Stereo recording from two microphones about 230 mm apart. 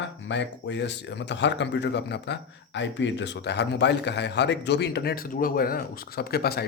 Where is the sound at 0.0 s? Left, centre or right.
Left.